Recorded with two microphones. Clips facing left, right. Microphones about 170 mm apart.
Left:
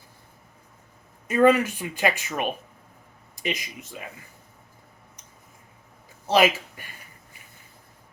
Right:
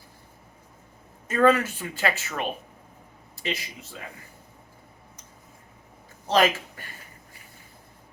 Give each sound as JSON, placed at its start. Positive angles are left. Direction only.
{"t": 1.3, "sound": "speech", "side_deg": 15}
{"t": 6.2, "sound": "speech", "side_deg": 10}